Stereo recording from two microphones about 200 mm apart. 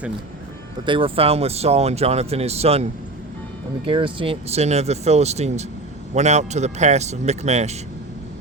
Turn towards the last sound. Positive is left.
turn(degrees=-35)  # may be behind; listen again after turning